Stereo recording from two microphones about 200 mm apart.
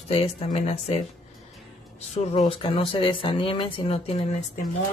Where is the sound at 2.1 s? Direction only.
30° left (ahead or behind).